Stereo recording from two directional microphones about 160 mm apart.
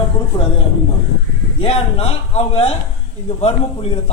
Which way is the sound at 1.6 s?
40° left (ahead or behind).